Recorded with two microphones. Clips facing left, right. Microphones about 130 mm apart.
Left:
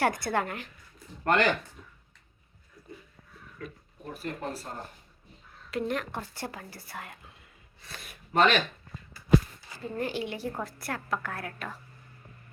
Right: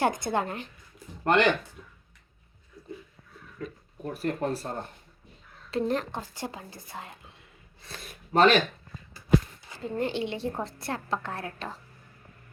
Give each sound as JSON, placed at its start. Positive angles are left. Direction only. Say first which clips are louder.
{"t": 0.0, "sound": "a woman's voice", "louder": "right 1 dB", "side_deg": -20}
{"t": 4.2, "sound": "speech", "louder": "right 7 dB", "side_deg": -35}
{"t": 5.7, "sound": "speech", "louder": "right 3 dB", "side_deg": -30}
{"t": 6.1, "sound": "a woman's voice", "louder": "right 1 dB", "side_deg": -20}
{"t": 9.6, "sound": "a woman's voice", "louder": "right 3 dB", "side_deg": -20}